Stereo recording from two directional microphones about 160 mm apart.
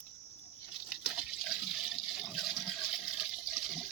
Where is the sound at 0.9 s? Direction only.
5° right (ahead or behind).